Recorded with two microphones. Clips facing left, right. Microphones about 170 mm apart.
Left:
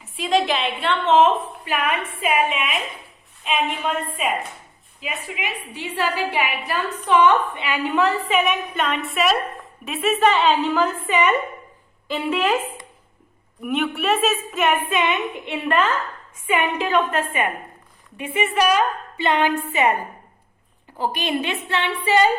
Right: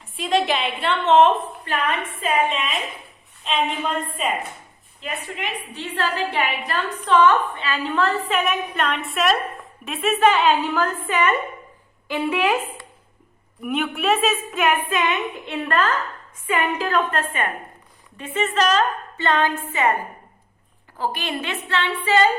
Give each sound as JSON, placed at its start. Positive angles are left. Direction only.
{"t": 0.0, "sound": "a woman's voice", "side_deg": 0}
{"t": 8.3, "sound": "a woman's voice", "side_deg": 0}
{"t": 10.8, "sound": "a woman's voice", "side_deg": 10}
{"t": 12.1, "sound": "a woman's voice", "side_deg": -15}
{"t": 13.6, "sound": "a woman's voice", "side_deg": 0}
{"t": 21.0, "sound": "a woman's voice", "side_deg": 15}